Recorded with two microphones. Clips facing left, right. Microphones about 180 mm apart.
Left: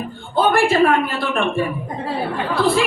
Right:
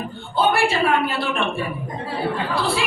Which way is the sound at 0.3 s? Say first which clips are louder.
Left 3 dB; 50° left (ahead or behind).